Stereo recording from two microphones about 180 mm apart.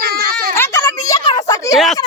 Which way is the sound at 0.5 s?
15° left (ahead or behind).